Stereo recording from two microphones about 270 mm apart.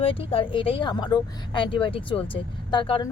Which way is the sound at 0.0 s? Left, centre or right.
Centre.